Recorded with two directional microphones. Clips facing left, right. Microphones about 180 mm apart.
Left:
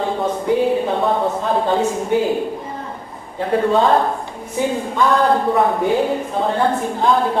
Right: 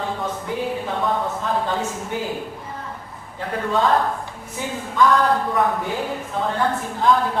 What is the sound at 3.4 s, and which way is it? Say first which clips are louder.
Speech: left 6 dB; 25° left (ahead or behind).